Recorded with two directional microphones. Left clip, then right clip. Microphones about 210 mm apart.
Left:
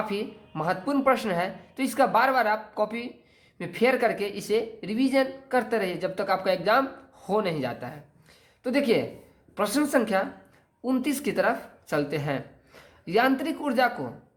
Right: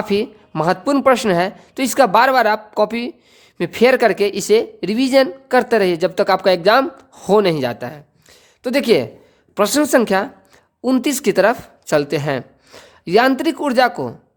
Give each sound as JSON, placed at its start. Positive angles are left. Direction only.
{"t": 0.1, "sound": "speech", "side_deg": -55}